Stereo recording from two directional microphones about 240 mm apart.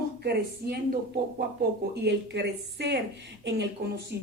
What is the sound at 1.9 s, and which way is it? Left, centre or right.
A woman's voice, right.